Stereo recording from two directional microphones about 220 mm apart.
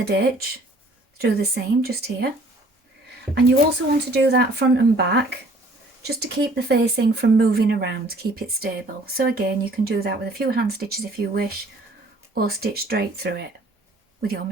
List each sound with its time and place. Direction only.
0.0 s speech: 45° right (ahead or behind)
3.9 s speech: 50° right (ahead or behind)